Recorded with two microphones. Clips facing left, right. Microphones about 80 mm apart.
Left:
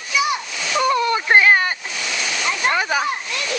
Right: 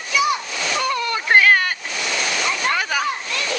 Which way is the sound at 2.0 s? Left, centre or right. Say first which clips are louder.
Right 2 dB; centre.